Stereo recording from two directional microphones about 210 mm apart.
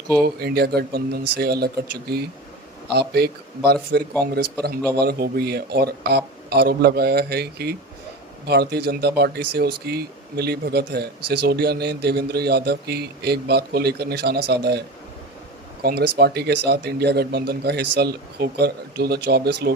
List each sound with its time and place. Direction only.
0.2 s speech: 50° right (ahead or behind)